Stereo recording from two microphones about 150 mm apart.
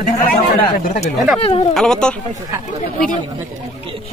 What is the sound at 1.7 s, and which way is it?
Speech, 5° left (ahead or behind).